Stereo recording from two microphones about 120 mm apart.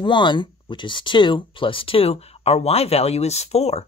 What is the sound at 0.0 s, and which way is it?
Speech, 40° left (ahead or behind).